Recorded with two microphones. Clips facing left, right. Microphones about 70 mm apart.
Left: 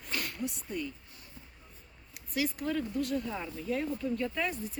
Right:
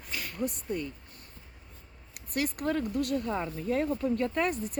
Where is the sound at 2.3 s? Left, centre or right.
Right.